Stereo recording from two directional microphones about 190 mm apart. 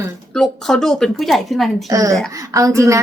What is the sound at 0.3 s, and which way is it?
A woman's voice, centre (ahead or behind).